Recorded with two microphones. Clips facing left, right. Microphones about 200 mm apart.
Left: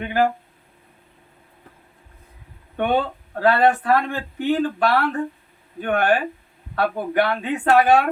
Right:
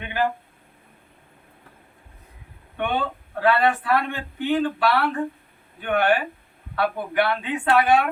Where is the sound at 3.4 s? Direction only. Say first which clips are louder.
Left 3 dB; 45° left (ahead or behind).